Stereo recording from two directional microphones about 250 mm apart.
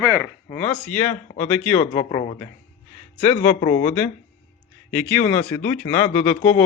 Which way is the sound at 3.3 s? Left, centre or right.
Left.